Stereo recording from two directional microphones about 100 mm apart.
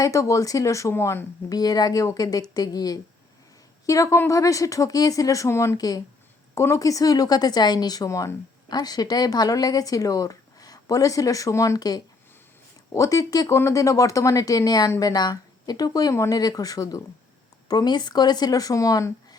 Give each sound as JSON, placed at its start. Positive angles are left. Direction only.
{"t": 0.0, "sound": "speech", "side_deg": 30}